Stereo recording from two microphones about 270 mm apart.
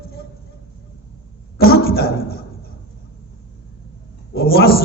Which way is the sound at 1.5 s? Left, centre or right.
Left.